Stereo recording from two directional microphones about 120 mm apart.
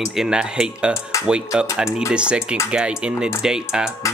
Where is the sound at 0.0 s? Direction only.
5° right (ahead or behind).